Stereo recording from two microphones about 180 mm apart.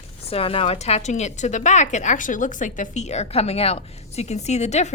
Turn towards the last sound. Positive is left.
turn(degrees=40)  # may be behind; listen again after turning